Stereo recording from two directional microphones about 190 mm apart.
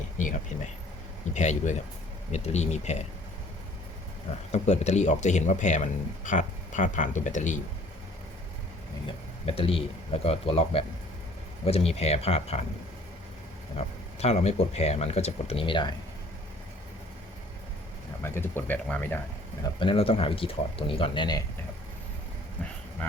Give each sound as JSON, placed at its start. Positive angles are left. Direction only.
{"t": 0.2, "sound": "speech", "side_deg": 40}
{"t": 4.5, "sound": "speech", "side_deg": 35}
{"t": 9.0, "sound": "speech", "side_deg": 30}
{"t": 13.7, "sound": "speech", "side_deg": 35}
{"t": 18.2, "sound": "speech", "side_deg": 10}
{"t": 19.8, "sound": "speech", "side_deg": 30}